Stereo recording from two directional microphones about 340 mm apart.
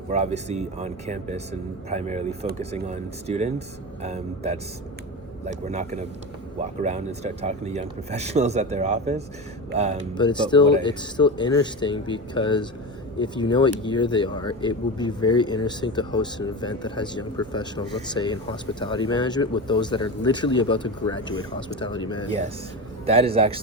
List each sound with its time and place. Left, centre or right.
0.1 s speech: centre
10.2 s speech: centre
23.0 s a man's voice: centre